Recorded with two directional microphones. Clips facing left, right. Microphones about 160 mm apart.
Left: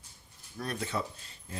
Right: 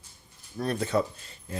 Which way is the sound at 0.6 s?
30° right (ahead or behind).